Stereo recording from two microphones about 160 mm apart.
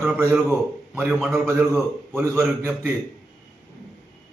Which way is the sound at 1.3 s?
15° right (ahead or behind).